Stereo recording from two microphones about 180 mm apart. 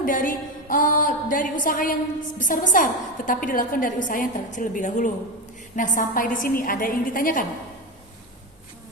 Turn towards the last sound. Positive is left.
turn(degrees=50)  # may be behind; listen again after turning